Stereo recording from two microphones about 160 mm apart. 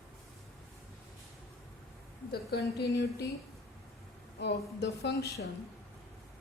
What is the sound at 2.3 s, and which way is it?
Speech, 85° left.